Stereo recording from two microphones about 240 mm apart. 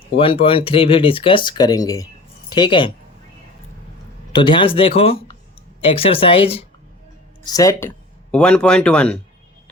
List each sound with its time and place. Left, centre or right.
0.2 s speech: left
4.3 s speech: centre